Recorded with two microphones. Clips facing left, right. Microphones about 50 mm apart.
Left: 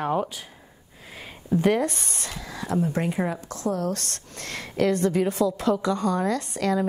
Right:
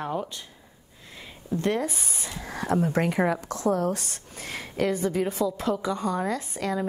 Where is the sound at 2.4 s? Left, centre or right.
Right.